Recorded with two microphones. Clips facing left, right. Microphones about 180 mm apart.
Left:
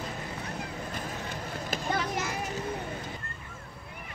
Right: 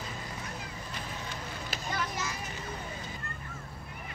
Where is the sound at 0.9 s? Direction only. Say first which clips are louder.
Left 4 dB; 50° left (ahead or behind).